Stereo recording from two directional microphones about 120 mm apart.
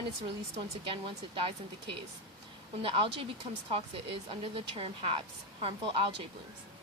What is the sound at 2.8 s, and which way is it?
Speech, 50° right (ahead or behind).